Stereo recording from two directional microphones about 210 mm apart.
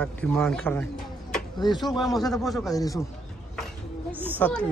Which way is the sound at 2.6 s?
15° left (ahead or behind).